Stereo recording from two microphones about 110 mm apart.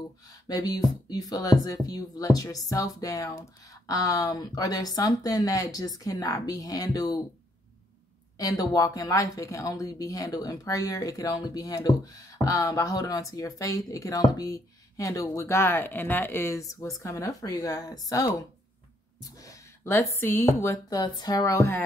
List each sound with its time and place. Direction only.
0.3 s speech: 35° left (ahead or behind)
8.4 s speech: 35° left (ahead or behind)